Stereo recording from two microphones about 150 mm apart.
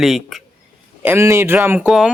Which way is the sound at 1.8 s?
Centre (ahead or behind).